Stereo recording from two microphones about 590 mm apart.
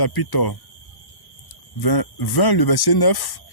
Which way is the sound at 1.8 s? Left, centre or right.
Left.